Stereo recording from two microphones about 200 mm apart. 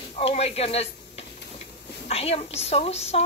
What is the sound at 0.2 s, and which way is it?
A man's voice, 30° left (ahead or behind).